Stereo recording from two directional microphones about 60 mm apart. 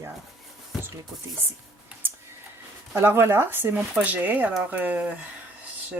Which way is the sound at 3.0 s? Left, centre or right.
Right.